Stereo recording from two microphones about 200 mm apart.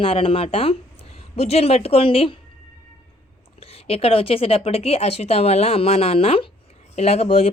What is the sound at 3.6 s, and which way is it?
Speech, 30° left (ahead or behind).